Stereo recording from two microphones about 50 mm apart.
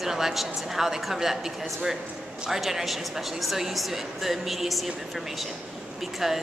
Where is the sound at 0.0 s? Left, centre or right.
Centre.